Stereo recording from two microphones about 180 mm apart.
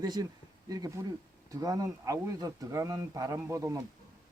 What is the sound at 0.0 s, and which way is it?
Speech, 20° right (ahead or behind).